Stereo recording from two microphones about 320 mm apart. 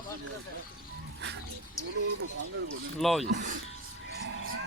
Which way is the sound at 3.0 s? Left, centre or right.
Centre.